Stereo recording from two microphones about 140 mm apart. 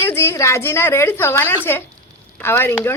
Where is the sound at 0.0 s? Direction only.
20° left (ahead or behind).